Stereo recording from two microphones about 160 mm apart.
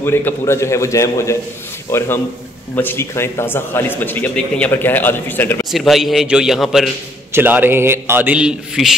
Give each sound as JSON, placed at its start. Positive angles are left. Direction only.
{"t": 0.0, "sound": "a man's voice", "side_deg": 15}
{"t": 5.7, "sound": "a man's voice", "side_deg": 0}
{"t": 7.3, "sound": "a man's voice", "side_deg": -10}